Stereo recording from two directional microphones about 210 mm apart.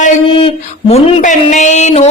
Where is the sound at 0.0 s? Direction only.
30° left (ahead or behind).